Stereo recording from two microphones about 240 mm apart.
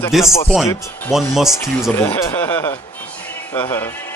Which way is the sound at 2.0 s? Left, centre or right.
Centre.